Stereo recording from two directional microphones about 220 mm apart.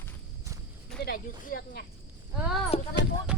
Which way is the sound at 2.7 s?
25° left (ahead or behind).